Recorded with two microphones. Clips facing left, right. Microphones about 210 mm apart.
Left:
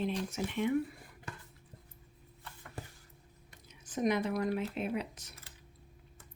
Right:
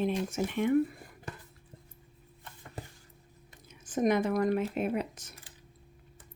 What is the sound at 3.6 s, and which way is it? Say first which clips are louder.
Speech: right 4 dB; 50° right (ahead or behind).